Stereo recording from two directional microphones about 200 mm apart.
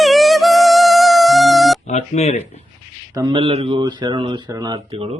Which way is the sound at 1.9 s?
35° left (ahead or behind).